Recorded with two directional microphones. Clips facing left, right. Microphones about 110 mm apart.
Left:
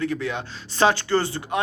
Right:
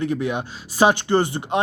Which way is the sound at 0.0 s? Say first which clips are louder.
Right 3 dB; 20° right (ahead or behind).